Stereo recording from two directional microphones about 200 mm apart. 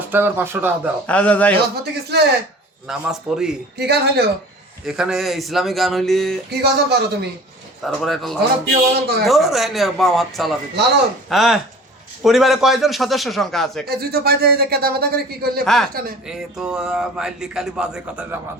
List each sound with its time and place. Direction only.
0.1 s speech: 10° right (ahead or behind)
1.0 s a man's voice: 5° left (ahead or behind)
1.7 s a man's voice: 55° right (ahead or behind)
2.8 s speech: 5° right (ahead or behind)
3.8 s a man's voice: 55° right (ahead or behind)
4.9 s speech: centre (ahead or behind)
6.5 s a man's voice: 55° right (ahead or behind)
7.8 s speech: centre (ahead or behind)
8.4 s speech: 50° right (ahead or behind)
9.2 s speech: centre (ahead or behind)
13.8 s speech: 50° right (ahead or behind)
15.6 s speech: centre (ahead or behind)